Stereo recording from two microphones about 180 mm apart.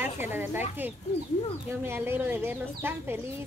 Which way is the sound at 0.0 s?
10° right (ahead or behind).